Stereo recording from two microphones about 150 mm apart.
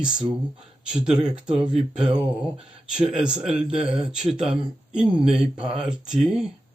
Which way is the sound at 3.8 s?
40° right (ahead or behind).